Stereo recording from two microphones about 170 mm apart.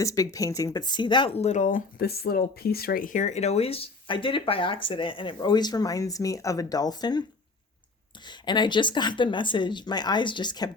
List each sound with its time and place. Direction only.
0.0 s speech: 20° left (ahead or behind)
8.3 s speech: 25° left (ahead or behind)